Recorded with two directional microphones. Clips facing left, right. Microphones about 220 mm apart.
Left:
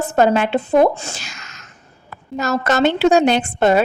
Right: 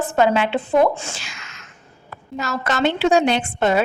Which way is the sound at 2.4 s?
45° left (ahead or behind).